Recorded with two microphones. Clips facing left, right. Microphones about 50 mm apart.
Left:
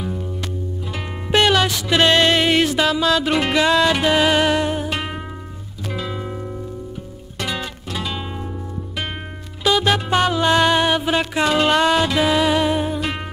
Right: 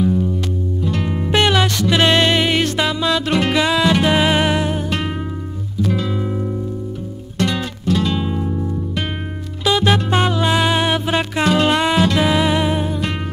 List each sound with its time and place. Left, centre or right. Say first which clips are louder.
0.0 s music: right 9 dB; centre
1.3 s music: left 1 dB; centre
2.0 s music: even; centre
2.6 s music: left 1 dB; centre